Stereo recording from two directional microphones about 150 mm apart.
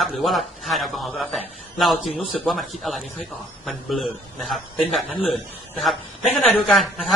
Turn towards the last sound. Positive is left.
turn(degrees=0)  # may be behind; listen again after turning